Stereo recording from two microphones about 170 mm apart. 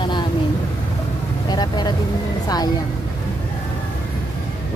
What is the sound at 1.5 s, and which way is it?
Vehicle, 25° left (ahead or behind).